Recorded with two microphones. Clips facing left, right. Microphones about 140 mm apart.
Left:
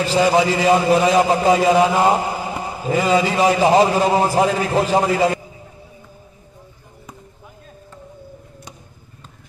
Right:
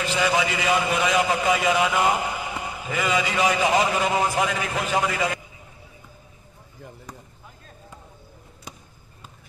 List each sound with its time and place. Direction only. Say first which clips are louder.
0.0 s a man's voice: left 7 dB; 35° left (ahead or behind)